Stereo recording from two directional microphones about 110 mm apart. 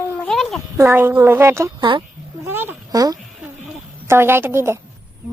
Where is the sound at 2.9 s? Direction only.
35° right (ahead or behind).